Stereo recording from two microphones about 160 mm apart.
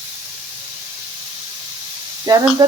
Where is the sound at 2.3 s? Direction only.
25° right (ahead or behind).